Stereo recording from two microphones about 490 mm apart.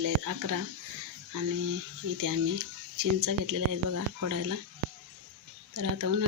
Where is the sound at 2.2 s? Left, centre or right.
Right.